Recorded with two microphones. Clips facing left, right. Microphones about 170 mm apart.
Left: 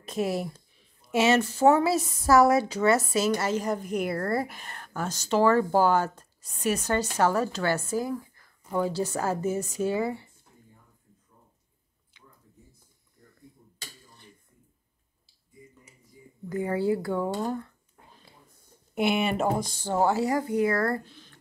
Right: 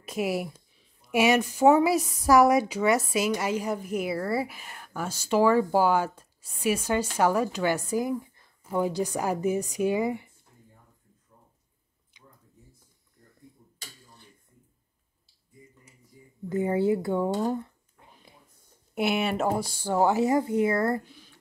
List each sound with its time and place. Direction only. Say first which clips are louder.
0.0 s a woman's voice: even; 10° right (ahead or behind)
16.4 s speech: right 2 dB; 25° right (ahead or behind)
18.9 s a woman's voice: left 1 dB; 5° right (ahead or behind)